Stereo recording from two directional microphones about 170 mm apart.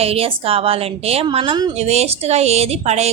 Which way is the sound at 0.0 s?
35° right (ahead or behind).